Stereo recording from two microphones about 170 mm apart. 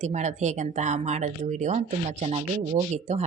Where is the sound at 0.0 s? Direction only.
40° right (ahead or behind).